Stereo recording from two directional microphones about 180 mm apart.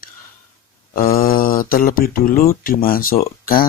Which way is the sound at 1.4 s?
50° left (ahead or behind).